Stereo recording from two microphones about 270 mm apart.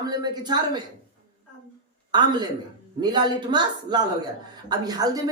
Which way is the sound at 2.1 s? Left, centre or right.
Centre.